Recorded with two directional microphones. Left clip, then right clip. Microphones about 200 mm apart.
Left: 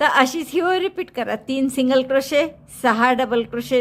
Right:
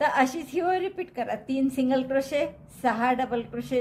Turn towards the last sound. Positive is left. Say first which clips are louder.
# left 9 dB
turn(degrees=40)  # may be behind; listen again after turning